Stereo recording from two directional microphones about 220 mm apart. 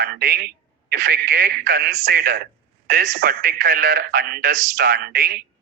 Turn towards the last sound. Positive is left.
turn(degrees=-45)  # may be behind; listen again after turning